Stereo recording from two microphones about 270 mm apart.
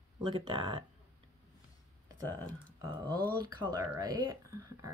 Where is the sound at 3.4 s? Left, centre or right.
Centre.